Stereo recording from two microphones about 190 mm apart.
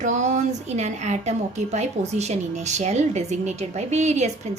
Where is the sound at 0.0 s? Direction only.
40° right (ahead or behind).